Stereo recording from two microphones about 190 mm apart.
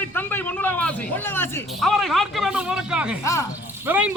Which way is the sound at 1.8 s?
Centre (ahead or behind).